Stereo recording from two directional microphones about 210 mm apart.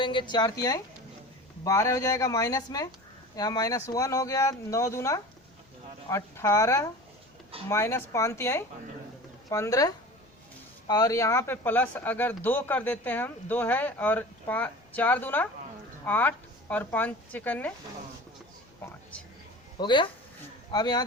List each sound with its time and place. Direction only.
0.0 s a woman's voice: 25° left (ahead or behind); by 17.7 s 5° left (ahead or behind)
19.8 s a woman's voice: 20° left (ahead or behind)